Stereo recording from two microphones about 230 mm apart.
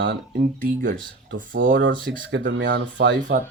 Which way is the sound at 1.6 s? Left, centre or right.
Right.